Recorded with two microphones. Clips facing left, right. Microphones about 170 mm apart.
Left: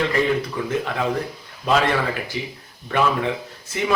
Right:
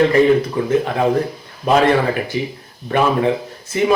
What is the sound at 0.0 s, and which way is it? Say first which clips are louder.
A man's voice: right 8 dB; 45° right (ahead or behind).